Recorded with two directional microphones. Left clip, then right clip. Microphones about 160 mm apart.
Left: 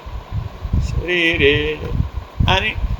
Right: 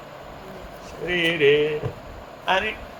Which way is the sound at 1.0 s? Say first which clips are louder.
Left 4 dB; 60° left (ahead or behind).